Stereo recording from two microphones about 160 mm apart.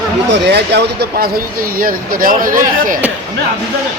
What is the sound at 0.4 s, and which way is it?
Speech, 90° right.